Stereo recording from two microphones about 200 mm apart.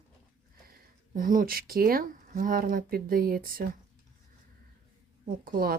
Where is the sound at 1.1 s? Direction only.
45° right (ahead or behind).